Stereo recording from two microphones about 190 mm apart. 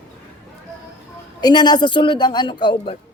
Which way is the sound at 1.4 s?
20° left (ahead or behind).